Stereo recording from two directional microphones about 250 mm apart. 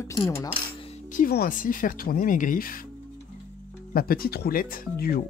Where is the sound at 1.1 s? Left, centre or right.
Left.